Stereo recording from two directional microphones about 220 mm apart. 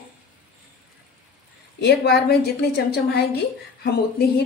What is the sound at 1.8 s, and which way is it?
A woman's voice, 45° left (ahead or behind).